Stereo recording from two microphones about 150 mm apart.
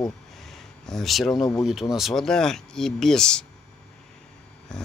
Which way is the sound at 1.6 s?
5° right (ahead or behind).